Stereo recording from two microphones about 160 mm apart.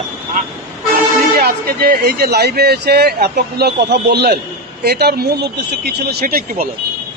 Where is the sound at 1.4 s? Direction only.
75° right (ahead or behind).